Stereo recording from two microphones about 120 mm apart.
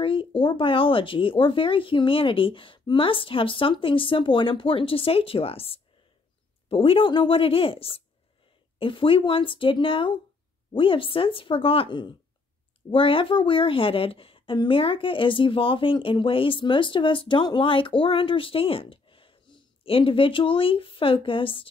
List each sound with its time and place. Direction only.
0.0 s a woman's voice: 50° left (ahead or behind)